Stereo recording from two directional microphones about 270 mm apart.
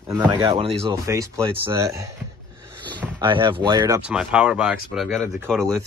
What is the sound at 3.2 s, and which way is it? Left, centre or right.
Speech, centre.